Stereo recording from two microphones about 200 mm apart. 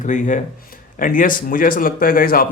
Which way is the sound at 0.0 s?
40° left (ahead or behind).